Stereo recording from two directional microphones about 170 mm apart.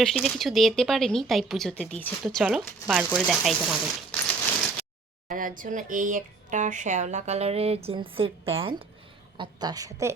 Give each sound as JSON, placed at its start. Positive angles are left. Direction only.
{"t": 0.0, "sound": "speech", "side_deg": 0}
{"t": 2.2, "sound": "speech", "side_deg": -5}
{"t": 5.3, "sound": "a woman's voice", "side_deg": -55}